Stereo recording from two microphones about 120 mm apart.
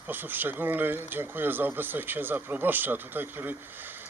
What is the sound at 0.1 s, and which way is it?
Speech, 15° right (ahead or behind).